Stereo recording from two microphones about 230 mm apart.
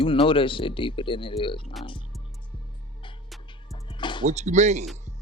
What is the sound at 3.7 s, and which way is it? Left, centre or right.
Music, centre.